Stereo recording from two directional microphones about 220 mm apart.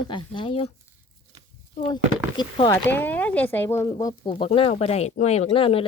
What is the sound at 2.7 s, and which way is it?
Speech, 10° left (ahead or behind).